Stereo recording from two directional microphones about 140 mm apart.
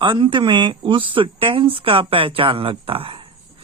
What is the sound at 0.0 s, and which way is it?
Mantra, 35° right (ahead or behind).